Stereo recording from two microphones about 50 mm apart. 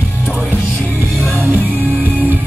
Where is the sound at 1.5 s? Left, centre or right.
Right.